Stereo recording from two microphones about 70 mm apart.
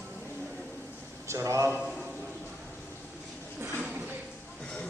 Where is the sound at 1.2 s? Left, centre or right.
Right.